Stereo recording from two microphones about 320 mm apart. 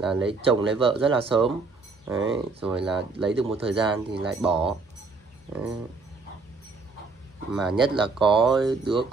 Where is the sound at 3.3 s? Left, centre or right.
Centre.